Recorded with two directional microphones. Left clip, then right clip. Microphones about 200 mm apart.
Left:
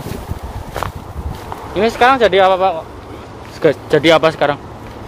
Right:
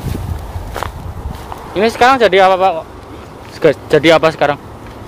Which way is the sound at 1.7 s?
20° right (ahead or behind).